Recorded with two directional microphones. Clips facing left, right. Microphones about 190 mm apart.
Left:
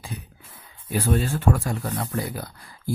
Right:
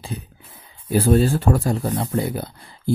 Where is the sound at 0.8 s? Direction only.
35° right (ahead or behind).